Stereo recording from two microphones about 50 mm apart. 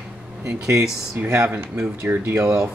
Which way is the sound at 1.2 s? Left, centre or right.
Right.